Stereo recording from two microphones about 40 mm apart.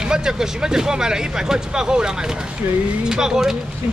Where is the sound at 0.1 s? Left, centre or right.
Centre.